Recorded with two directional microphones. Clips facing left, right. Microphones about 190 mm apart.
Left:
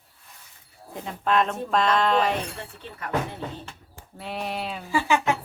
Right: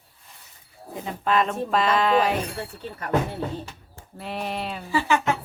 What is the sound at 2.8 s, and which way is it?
Speech, 40° right (ahead or behind).